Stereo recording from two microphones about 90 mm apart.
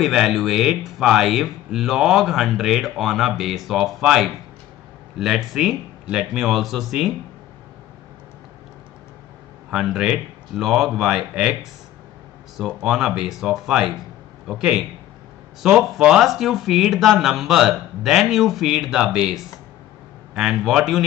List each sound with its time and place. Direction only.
0.0 s speech: 5° right (ahead or behind)
9.7 s speech: 5° right (ahead or behind)
12.5 s speech: 5° right (ahead or behind)